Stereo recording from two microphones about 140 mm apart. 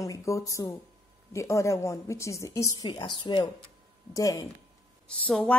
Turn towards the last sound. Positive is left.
turn(degrees=5)  # may be behind; listen again after turning